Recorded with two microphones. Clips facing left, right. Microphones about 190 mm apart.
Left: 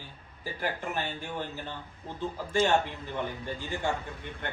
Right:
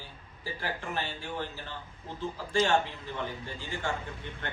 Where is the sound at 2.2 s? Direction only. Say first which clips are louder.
Left 1 dB; 20° left (ahead or behind).